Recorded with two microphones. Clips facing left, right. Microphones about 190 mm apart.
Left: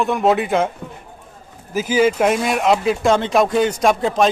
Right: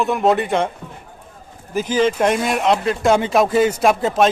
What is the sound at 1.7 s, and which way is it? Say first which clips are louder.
Speech: left 1 dB; 10° left (ahead or behind).